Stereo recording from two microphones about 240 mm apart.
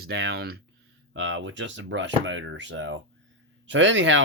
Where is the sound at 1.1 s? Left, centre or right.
Right.